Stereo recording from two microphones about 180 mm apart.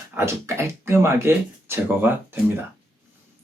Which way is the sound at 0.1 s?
15° right (ahead or behind).